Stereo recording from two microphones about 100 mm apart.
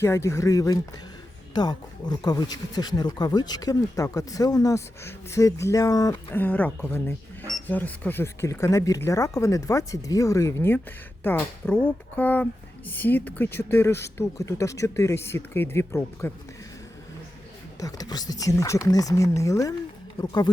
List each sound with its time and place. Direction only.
0.0 s speech: 30° left (ahead or behind)
1.5 s speech: 45° left (ahead or behind)
6.3 s speech: 15° left (ahead or behind)
17.7 s speech: 35° left (ahead or behind)